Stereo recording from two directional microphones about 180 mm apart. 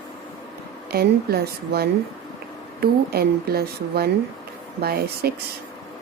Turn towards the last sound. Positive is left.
turn(degrees=-60)  # may be behind; listen again after turning